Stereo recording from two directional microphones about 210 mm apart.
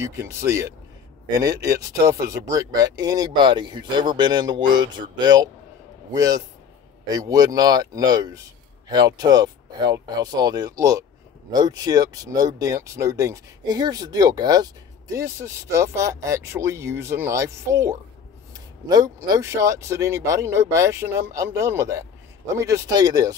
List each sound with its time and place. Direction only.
0.0 s speech: 15° right (ahead or behind)